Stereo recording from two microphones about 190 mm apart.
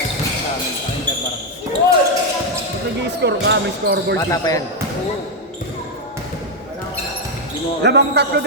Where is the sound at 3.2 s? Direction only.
65° right (ahead or behind).